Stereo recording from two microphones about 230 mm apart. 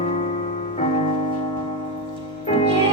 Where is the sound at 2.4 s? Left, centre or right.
Left.